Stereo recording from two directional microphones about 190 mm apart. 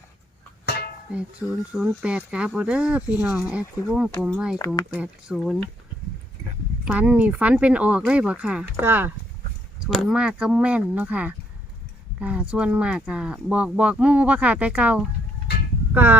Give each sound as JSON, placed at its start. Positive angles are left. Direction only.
{"t": 0.6, "sound": "music", "side_deg": 60}
{"t": 1.1, "sound": "speech", "side_deg": -5}
{"t": 6.8, "sound": "speech", "side_deg": -5}